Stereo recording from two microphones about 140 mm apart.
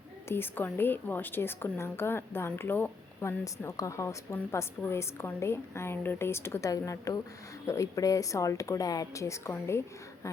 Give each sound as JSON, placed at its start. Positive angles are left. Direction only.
{"t": 0.3, "sound": "a woman's voice", "side_deg": 15}